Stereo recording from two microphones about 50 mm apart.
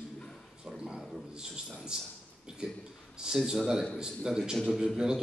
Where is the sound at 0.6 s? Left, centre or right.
Centre.